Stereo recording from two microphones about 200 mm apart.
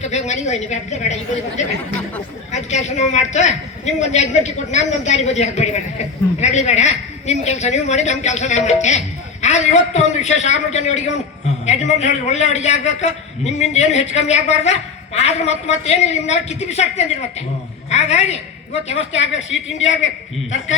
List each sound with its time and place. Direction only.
0.0 s a man's voice: 35° left (ahead or behind)
19.1 s a woman's voice: 65° left (ahead or behind)